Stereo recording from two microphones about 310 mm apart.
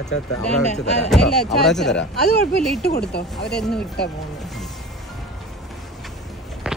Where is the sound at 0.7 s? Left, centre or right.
Left.